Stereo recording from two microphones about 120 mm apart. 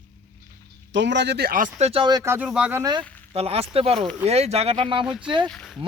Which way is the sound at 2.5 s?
10° right (ahead or behind).